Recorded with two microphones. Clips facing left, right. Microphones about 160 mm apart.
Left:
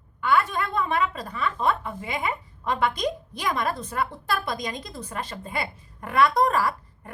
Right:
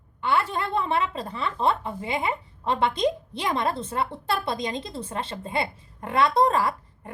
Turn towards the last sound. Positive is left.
turn(degrees=-25)  # may be behind; listen again after turning